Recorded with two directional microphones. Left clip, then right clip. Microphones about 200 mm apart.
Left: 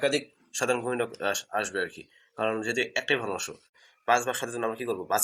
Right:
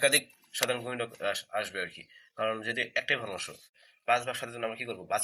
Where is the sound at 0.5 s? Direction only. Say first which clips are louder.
Left 4 dB; 25° left (ahead or behind).